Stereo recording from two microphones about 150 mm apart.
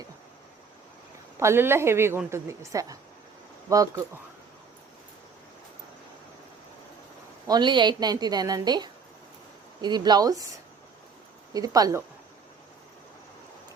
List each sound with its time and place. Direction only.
1.4 s a woman's voice: 15° right (ahead or behind)
7.4 s a woman's voice: 30° right (ahead or behind)
11.5 s a woman's voice: 25° right (ahead or behind)